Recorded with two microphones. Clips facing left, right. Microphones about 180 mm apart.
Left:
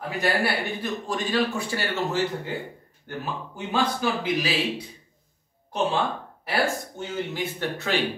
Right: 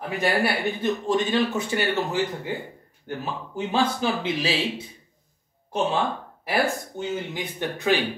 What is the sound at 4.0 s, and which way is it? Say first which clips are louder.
Speech: even; 25° right (ahead or behind).